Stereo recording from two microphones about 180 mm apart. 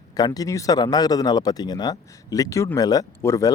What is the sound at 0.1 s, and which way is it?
Speech, 20° left (ahead or behind).